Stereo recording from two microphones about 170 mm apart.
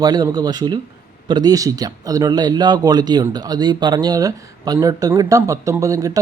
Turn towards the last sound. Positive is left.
turn(degrees=-20)  # may be behind; listen again after turning